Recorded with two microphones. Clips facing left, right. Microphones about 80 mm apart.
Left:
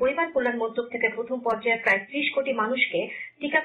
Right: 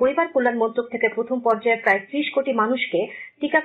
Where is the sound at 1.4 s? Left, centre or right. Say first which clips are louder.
Right 6 dB; right.